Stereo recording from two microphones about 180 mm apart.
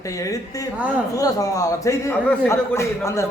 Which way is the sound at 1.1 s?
20° left (ahead or behind).